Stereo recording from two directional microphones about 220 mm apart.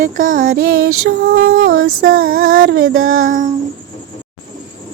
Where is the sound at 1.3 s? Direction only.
65° right (ahead or behind).